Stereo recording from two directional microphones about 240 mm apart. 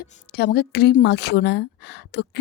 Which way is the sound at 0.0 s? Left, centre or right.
Left.